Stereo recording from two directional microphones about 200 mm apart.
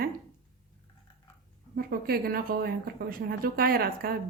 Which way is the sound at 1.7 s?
50° right (ahead or behind).